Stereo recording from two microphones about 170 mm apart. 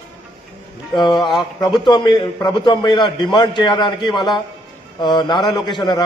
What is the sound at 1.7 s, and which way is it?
A man's voice, 25° left (ahead or behind).